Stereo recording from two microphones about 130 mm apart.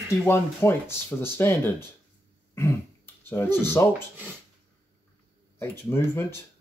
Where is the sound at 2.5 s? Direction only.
15° left (ahead or behind).